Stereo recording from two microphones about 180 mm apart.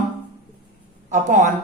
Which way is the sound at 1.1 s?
45° right (ahead or behind).